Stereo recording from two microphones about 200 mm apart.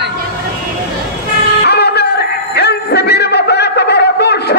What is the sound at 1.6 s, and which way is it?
Music, 55° left (ahead or behind).